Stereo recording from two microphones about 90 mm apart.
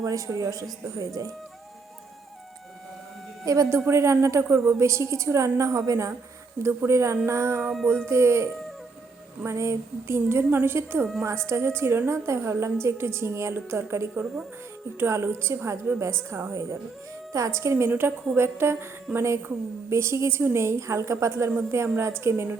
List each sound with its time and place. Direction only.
0.0 s a woman's voice: 40° right (ahead or behind)
3.4 s a woman's voice: 40° right (ahead or behind)
9.5 s a woman's voice: 30° right (ahead or behind)